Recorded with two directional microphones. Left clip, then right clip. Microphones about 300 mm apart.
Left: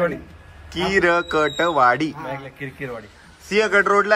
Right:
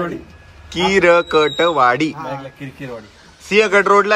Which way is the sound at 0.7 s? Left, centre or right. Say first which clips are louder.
Right 6 dB; centre.